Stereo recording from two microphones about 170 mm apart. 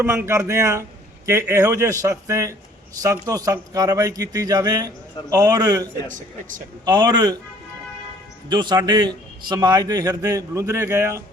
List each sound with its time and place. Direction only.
0.3 s a man's voice: 15° right (ahead or behind)
6.1 s speech: 50° right (ahead or behind)
6.8 s speech: 25° right (ahead or behind)
8.4 s speech: 25° right (ahead or behind)